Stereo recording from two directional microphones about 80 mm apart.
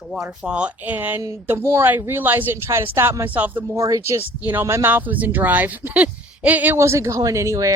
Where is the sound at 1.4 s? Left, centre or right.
Right.